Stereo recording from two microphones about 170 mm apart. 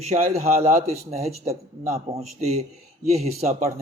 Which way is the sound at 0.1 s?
45° right (ahead or behind).